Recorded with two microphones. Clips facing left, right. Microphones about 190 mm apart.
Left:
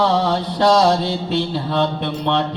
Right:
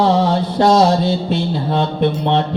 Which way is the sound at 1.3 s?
50° right (ahead or behind).